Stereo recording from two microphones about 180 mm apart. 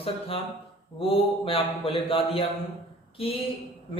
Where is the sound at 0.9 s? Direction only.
30° left (ahead or behind).